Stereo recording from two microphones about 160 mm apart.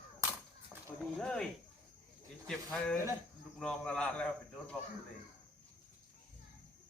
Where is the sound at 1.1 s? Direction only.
5° left (ahead or behind).